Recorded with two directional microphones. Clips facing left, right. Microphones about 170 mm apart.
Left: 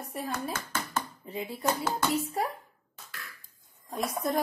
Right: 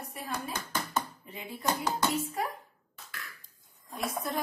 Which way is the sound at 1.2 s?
30° left (ahead or behind).